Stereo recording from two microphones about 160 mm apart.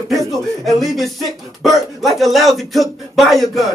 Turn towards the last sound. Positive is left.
turn(degrees=0)  # may be behind; listen again after turning